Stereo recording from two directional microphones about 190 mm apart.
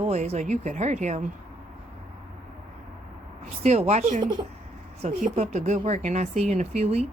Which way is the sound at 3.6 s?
35° right (ahead or behind).